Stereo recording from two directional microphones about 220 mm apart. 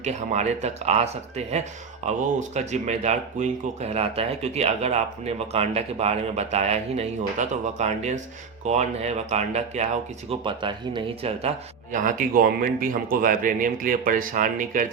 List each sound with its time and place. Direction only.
0.0 s speech: 30° right (ahead or behind)
2.0 s speech: 30° right (ahead or behind)